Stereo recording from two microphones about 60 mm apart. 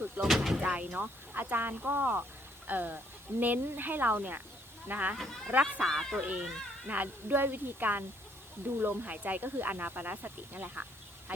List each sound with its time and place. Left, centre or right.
0.2 s speech: centre
0.6 s speech: right
5.8 s speech: centre
6.2 s speech: right